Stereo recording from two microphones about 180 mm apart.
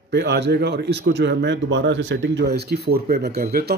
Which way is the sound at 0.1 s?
70° right (ahead or behind).